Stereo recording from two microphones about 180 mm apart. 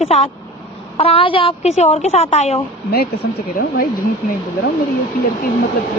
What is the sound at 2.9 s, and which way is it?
Speech, 60° left (ahead or behind).